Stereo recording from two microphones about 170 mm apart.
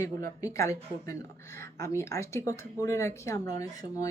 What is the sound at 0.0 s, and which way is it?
Speech, 20° left (ahead or behind).